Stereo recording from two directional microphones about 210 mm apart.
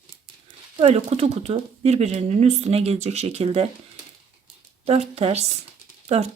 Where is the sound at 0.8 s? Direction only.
30° right (ahead or behind).